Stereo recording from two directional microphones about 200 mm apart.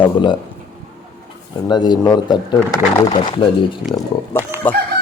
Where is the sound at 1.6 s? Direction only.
20° left (ahead or behind).